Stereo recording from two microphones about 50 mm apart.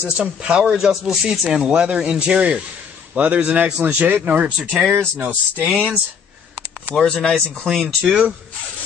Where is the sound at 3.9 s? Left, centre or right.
Right.